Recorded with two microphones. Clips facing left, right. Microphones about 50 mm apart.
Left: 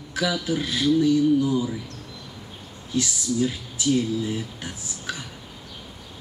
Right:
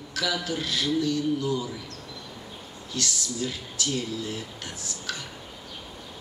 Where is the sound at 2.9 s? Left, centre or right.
Centre.